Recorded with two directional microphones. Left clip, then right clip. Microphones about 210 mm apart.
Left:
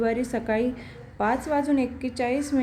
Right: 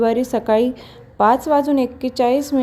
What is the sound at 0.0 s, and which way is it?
A woman's voice, 30° right (ahead or behind).